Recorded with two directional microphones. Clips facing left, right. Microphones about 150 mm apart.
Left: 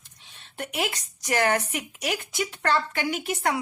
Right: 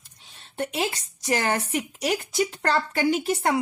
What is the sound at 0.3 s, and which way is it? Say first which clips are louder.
Speech: right 3 dB; 30° right (ahead or behind).